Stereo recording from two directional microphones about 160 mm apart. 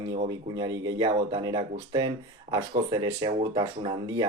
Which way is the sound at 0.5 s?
25° right (ahead or behind).